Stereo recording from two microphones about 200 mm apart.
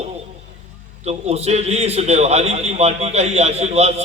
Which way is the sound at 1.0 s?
30° right (ahead or behind).